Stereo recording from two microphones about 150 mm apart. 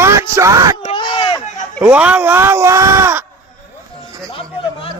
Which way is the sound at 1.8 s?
10° right (ahead or behind).